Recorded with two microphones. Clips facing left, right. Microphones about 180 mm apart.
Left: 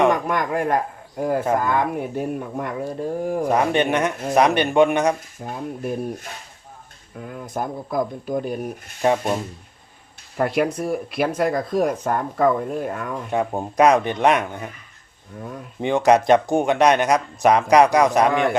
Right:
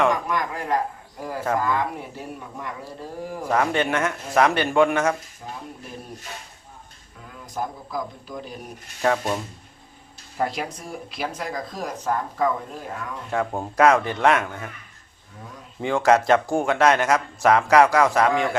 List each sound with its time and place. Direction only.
0.1 s speech: 55° left (ahead or behind)
3.5 s speech: 20° left (ahead or behind)
5.4 s speech: 55° left (ahead or behind)
7.2 s speech: 55° left (ahead or behind)
9.0 s speech: 15° left (ahead or behind)
10.3 s speech: 60° left (ahead or behind)
13.3 s speech: 20° left (ahead or behind)
15.8 s speech: 20° left (ahead or behind)
18.3 s speech: 60° left (ahead or behind)